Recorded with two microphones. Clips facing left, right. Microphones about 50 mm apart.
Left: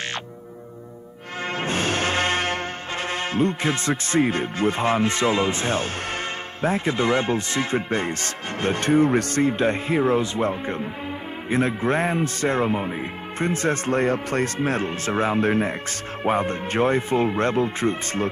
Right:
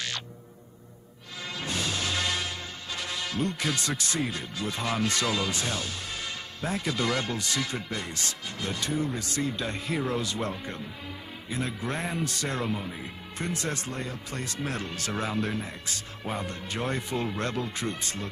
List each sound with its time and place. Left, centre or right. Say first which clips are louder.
1.5 s music: left 8 dB; left
6.6 s speech: left 7 dB; left
14.6 s speech: left 9 dB; left